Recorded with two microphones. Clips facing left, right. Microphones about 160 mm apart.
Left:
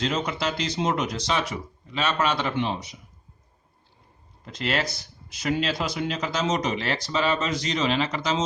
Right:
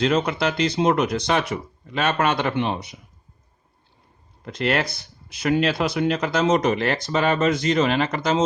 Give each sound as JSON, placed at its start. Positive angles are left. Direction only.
{"t": 0.0, "sound": "speech", "side_deg": -60}
{"t": 4.4, "sound": "speech", "side_deg": -60}